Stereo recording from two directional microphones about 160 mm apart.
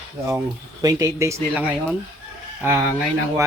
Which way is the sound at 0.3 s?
20° right (ahead or behind).